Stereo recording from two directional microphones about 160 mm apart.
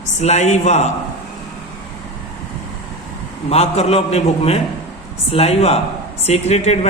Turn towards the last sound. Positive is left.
turn(degrees=45)  # may be behind; listen again after turning